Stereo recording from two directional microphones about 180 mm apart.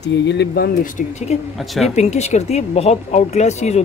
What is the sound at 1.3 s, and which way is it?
Speech, 35° left (ahead or behind).